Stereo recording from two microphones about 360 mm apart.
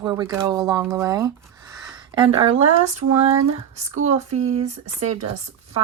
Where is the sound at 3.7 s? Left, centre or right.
Centre.